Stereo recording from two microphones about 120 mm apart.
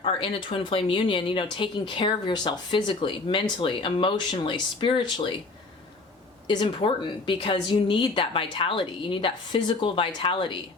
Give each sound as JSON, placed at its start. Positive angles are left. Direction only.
{"t": 0.0, "sound": "speech", "side_deg": 45}
{"t": 6.5, "sound": "speech", "side_deg": 40}